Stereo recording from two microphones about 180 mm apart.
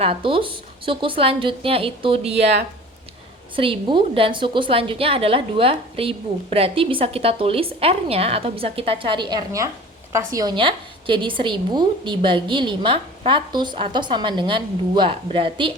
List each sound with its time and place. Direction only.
0.0 s a woman's voice: 30° right (ahead or behind)
3.5 s a woman's voice: 30° right (ahead or behind)